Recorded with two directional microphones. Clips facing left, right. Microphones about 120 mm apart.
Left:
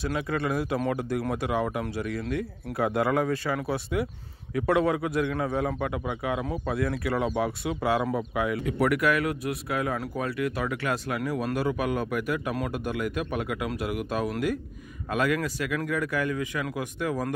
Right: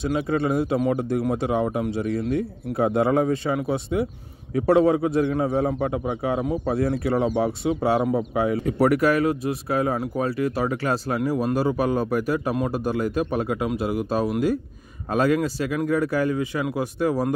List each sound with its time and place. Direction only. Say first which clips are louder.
0.0 s speech: right 5 dB; 25° right (ahead or behind)